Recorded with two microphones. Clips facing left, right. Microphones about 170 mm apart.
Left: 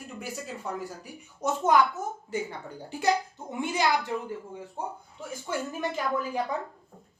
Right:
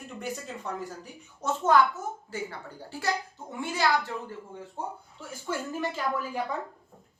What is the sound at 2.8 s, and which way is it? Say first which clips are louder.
A child's voice: left 5 dB; 20° left (ahead or behind).